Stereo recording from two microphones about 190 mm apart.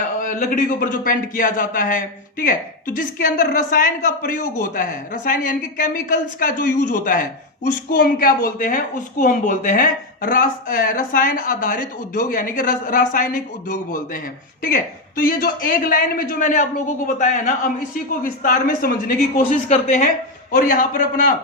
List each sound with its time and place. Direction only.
0.2 s a man's voice: 45° left (ahead or behind)
15.2 s a man's voice: 50° left (ahead or behind)